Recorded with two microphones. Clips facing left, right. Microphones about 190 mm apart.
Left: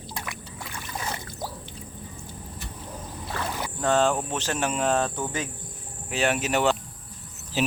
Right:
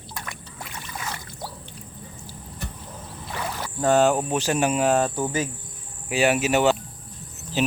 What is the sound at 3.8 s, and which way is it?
Speech, 10° right (ahead or behind).